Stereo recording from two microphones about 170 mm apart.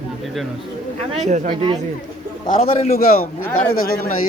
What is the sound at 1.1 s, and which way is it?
Speech, 45° right (ahead or behind).